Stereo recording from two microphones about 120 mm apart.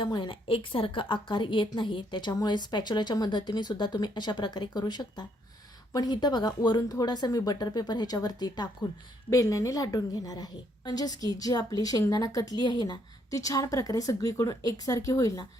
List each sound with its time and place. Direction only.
0.0 s a woman's voice: 40° left (ahead or behind)